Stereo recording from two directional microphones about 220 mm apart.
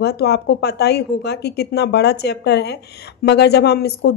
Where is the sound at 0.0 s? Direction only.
45° left (ahead or behind).